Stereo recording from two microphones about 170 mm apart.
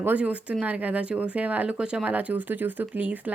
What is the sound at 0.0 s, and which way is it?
Speech, 10° right (ahead or behind).